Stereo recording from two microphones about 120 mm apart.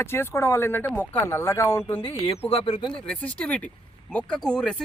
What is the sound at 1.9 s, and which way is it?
Speech, 55° left (ahead or behind).